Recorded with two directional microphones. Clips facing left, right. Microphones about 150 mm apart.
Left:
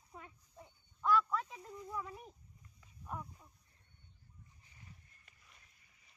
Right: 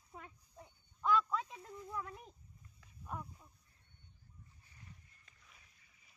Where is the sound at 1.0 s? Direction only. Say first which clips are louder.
Left 1 dB; 15° right (ahead or behind).